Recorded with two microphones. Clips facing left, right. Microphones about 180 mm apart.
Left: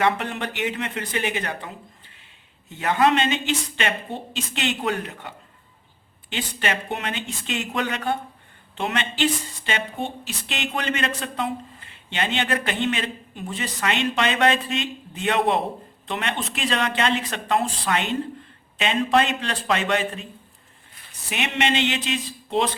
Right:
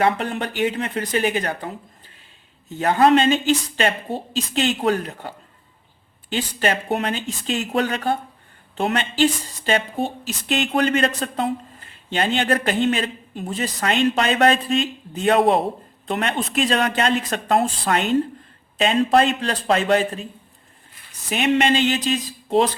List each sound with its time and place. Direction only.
0.0 s speech: 35° right (ahead or behind)
6.3 s speech: 40° right (ahead or behind)
21.2 s speech: 40° right (ahead or behind)